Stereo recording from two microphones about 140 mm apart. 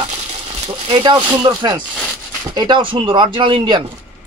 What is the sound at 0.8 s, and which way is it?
Speech, 35° right (ahead or behind).